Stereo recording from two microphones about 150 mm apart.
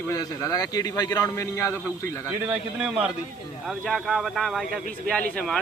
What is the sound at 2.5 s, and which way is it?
A man's voice, 5° right (ahead or behind).